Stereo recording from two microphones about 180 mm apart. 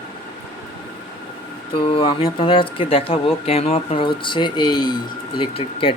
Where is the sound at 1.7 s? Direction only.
30° left (ahead or behind).